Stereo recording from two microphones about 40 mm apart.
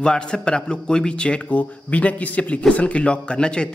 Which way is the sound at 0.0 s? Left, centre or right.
Left.